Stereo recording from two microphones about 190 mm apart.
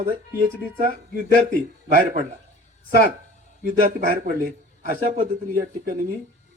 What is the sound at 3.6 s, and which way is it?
Speech, 45° right (ahead or behind).